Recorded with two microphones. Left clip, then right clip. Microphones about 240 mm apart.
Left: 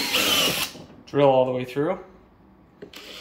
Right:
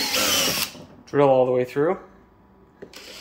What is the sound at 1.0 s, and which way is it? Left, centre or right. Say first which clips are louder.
Speech: right 1 dB; right.